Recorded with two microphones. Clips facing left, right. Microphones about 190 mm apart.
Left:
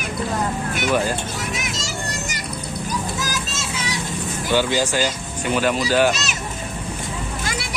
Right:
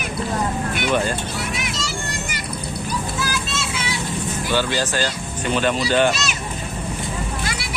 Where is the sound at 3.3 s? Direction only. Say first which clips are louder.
Right 2 dB; 40° left (ahead or behind).